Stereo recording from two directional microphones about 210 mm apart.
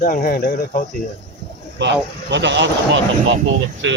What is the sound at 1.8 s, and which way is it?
Speech, 55° right (ahead or behind).